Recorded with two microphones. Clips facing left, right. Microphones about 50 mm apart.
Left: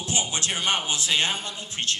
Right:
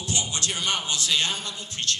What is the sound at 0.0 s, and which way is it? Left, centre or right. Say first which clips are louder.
Speech: left 1 dB; left.